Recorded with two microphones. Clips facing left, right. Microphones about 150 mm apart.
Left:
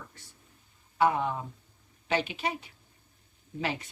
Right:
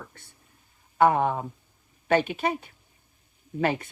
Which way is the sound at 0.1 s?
55° right (ahead or behind).